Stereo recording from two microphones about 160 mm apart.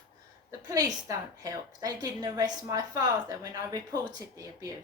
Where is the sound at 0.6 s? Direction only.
20° right (ahead or behind).